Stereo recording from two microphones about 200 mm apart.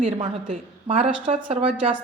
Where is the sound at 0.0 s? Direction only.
35° right (ahead or behind).